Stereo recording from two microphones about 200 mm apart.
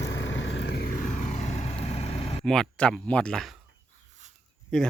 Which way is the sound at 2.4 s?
Centre (ahead or behind).